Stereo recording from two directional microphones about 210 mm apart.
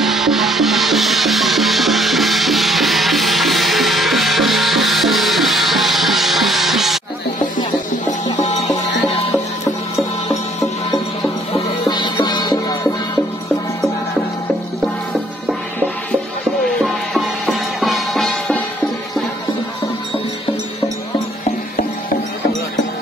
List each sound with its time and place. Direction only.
0.0 s music: centre (ahead or behind)
11.8 s music: 20° left (ahead or behind)
16.8 s music: centre (ahead or behind)